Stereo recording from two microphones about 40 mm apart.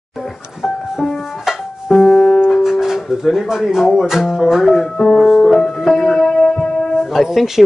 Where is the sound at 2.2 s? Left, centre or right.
Centre.